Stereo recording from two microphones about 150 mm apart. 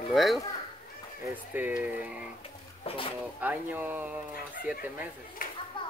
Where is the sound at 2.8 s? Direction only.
35° left (ahead or behind).